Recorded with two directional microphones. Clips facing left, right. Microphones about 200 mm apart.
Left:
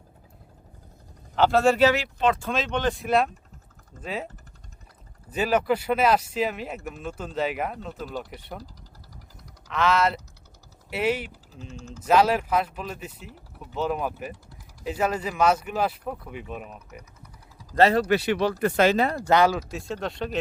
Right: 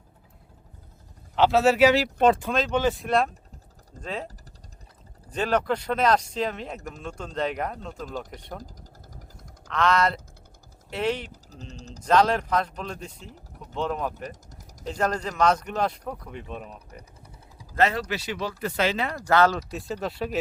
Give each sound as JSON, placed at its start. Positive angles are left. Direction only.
{"t": 1.4, "sound": "speech", "side_deg": 0}
{"t": 5.3, "sound": "speech", "side_deg": 5}
{"t": 9.6, "sound": "speech", "side_deg": 0}
{"t": 11.7, "sound": "speech", "side_deg": -40}
{"t": 12.0, "sound": "speech", "side_deg": 5}
{"t": 17.7, "sound": "speech", "side_deg": 35}
{"t": 18.1, "sound": "speech", "side_deg": 60}
{"t": 18.5, "sound": "speech", "side_deg": 50}
{"t": 19.3, "sound": "speech", "side_deg": 15}
{"t": 19.7, "sound": "speech", "side_deg": 0}